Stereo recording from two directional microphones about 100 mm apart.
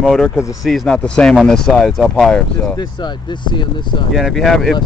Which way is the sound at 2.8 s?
50° left (ahead or behind).